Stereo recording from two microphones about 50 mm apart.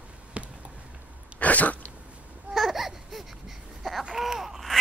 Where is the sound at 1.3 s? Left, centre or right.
Left.